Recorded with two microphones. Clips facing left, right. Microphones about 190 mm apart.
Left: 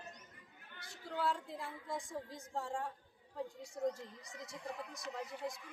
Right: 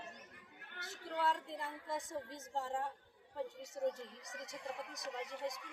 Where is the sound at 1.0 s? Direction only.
Centre (ahead or behind).